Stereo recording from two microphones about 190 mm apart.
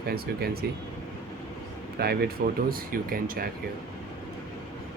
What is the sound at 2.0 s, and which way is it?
Speech, 55° right (ahead or behind).